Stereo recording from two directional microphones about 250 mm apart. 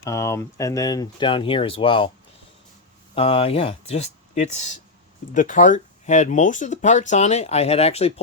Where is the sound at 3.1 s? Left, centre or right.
Left.